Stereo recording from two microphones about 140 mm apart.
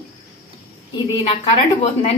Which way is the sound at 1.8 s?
45° left (ahead or behind).